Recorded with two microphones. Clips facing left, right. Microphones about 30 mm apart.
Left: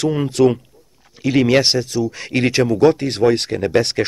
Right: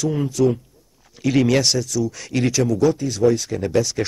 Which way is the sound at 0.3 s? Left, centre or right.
Left.